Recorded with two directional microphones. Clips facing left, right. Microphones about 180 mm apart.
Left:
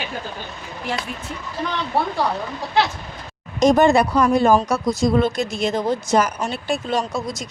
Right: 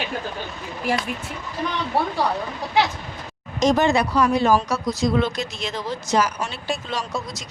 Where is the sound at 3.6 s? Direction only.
50° left (ahead or behind).